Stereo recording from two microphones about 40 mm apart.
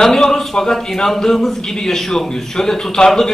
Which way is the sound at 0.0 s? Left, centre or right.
Centre.